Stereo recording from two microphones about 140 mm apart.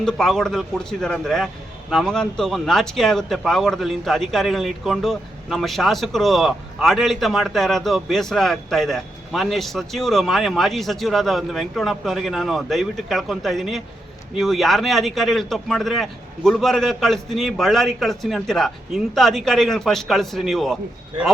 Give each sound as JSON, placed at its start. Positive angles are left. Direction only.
{"t": 0.0, "sound": "a man's voice", "side_deg": 5}